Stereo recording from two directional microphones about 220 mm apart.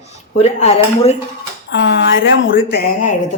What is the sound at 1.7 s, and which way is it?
Speech, 55° left (ahead or behind).